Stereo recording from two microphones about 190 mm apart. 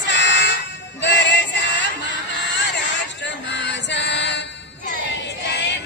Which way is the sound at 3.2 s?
70° left (ahead or behind).